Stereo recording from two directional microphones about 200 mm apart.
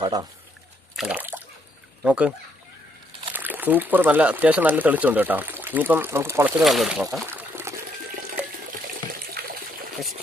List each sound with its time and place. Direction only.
0.0 s speech: 20° right (ahead or behind)
0.9 s water: 5° right (ahead or behind)
2.0 s speech: 5° right (ahead or behind)
3.3 s speech: 10° right (ahead or behind)
7.3 s water: 10° right (ahead or behind)